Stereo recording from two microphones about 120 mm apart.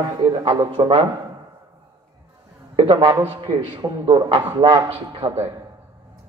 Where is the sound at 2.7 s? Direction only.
40° right (ahead or behind).